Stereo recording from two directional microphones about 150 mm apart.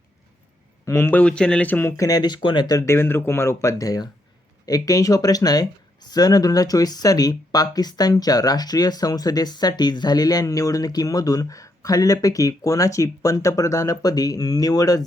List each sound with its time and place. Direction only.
0.9 s speech: 15° left (ahead or behind)